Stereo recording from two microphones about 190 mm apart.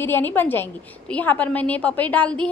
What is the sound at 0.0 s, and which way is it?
A woman's voice, 10° left (ahead or behind).